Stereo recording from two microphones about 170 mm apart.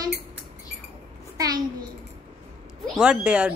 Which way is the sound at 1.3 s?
20° right (ahead or behind).